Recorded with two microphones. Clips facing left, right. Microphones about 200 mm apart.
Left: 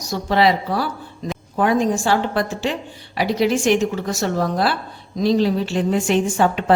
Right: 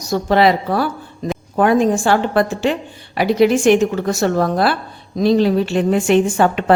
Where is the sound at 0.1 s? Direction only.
50° right (ahead or behind).